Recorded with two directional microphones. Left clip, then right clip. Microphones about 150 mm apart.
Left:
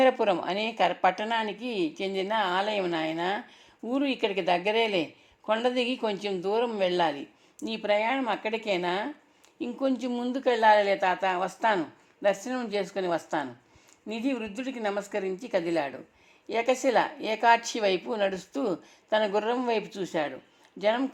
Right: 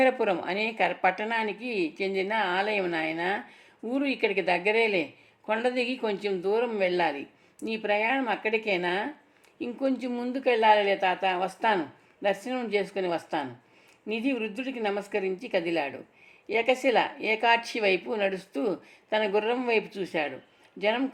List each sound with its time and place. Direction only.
0.0 s a woman's voice: 30° left (ahead or behind)